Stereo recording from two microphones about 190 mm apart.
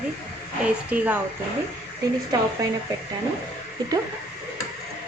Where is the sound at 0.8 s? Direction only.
10° right (ahead or behind).